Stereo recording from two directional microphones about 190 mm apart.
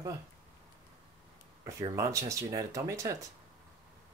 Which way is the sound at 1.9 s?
15° right (ahead or behind).